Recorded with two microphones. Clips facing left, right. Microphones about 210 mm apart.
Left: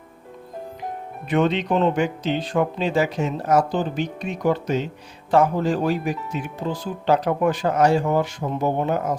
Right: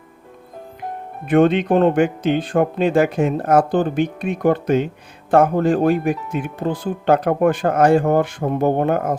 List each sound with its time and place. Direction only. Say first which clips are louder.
1.3 s speech: right 6 dB; 55° right (ahead or behind)